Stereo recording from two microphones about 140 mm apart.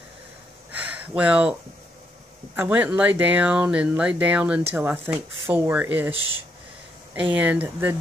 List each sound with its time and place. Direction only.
0.7 s a sound: 10° right (ahead or behind)
2.5 s speech: 10° right (ahead or behind)
7.2 s speech: 10° right (ahead or behind)